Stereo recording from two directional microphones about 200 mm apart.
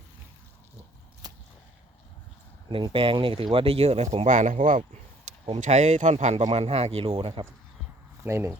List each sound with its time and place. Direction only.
1.2 s whip: 20° right (ahead or behind)
2.6 s speech: 25° right (ahead or behind)
8.2 s speech: 10° right (ahead or behind)